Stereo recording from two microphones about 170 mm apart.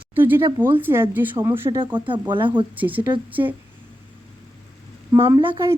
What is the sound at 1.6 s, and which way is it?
Speech, 30° right (ahead or behind).